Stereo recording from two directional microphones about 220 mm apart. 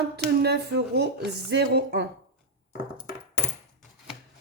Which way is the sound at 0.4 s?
50° right (ahead or behind).